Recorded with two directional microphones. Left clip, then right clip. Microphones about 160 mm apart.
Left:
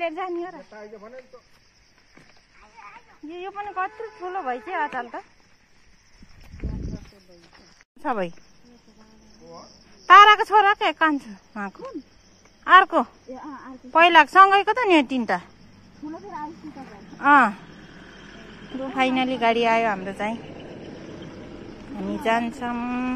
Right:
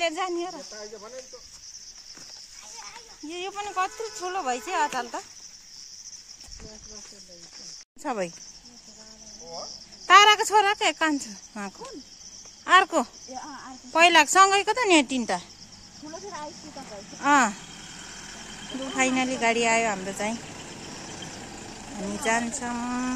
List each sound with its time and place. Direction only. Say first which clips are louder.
0.0 s speech: even; 25° right (ahead or behind)
0.7 s speech: even; 5° left (ahead or behind)
3.3 s speech: even; 20° right (ahead or behind)
8.0 s speech: left 4 dB; 10° right (ahead or behind)
10.0 s speech: left 5 dB; 10° right (ahead or behind)
17.2 s speech: left 5 dB; 10° right (ahead or behind)
18.8 s speech: left 3 dB; 10° right (ahead or behind)
22.2 s speech: left 3 dB; 5° right (ahead or behind)